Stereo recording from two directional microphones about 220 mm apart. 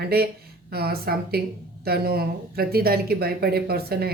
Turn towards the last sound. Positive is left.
turn(degrees=-45)  # may be behind; listen again after turning